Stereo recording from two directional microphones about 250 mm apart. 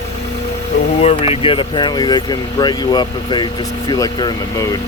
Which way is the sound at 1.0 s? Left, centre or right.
Left.